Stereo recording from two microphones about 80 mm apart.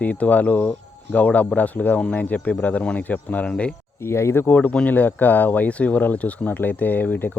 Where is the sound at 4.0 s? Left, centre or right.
Left.